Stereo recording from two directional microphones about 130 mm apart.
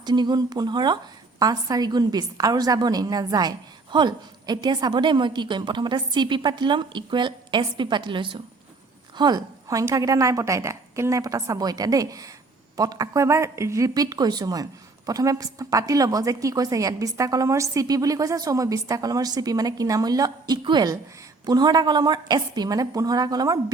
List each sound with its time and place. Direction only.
0.0 s a woman's voice: 35° right (ahead or behind)